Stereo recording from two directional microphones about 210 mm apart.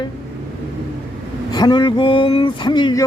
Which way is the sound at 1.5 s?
20° left (ahead or behind).